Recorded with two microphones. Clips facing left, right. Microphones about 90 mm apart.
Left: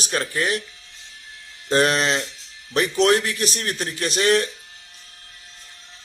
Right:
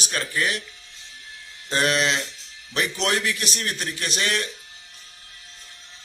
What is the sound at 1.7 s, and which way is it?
A man's voice, 40° left (ahead or behind).